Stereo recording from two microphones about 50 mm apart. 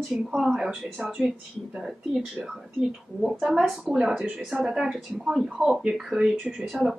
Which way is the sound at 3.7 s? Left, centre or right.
Centre.